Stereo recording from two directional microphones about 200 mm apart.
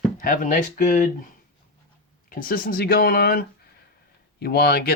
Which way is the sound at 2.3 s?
45° left (ahead or behind).